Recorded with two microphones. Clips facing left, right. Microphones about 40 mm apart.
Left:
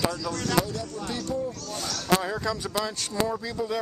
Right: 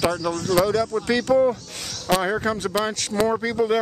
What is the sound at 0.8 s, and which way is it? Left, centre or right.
Speech, right.